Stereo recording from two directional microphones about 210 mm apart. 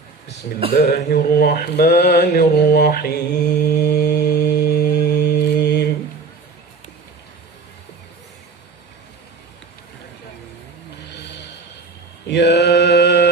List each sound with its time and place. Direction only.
0.8 s mantra: 50° left (ahead or behind)
11.1 s snort: 55° left (ahead or behind)
12.3 s mantra: 55° left (ahead or behind)